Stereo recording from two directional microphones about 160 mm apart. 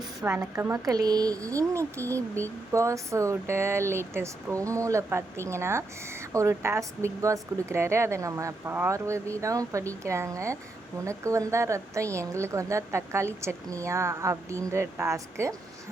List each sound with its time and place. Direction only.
0.2 s a woman's voice: 15° right (ahead or behind)